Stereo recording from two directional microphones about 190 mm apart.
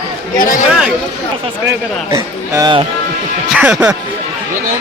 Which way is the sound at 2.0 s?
15° right (ahead or behind).